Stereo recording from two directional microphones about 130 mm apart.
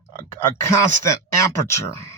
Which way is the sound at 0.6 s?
20° left (ahead or behind).